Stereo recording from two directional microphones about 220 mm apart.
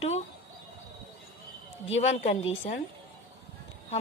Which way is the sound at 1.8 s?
30° left (ahead or behind).